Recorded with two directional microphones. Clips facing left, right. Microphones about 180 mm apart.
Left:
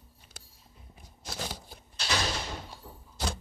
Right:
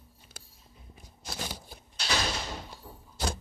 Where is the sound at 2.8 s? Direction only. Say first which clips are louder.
Right 1 dB; 10° right (ahead or behind).